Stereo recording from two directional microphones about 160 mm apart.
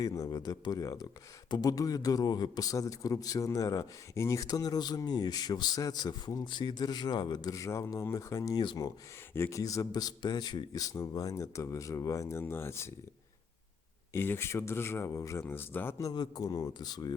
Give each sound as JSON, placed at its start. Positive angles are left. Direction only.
{"t": 0.0, "sound": "a man's voice", "side_deg": 20}
{"t": 14.1, "sound": "speech", "side_deg": 15}